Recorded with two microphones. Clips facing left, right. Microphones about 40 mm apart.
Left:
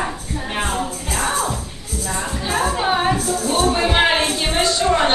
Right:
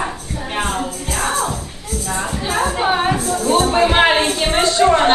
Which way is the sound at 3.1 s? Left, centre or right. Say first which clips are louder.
Right 3 dB; right.